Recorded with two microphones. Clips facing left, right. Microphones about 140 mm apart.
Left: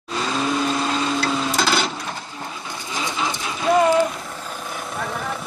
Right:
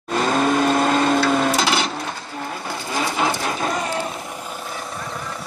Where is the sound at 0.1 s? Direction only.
50° right (ahead or behind).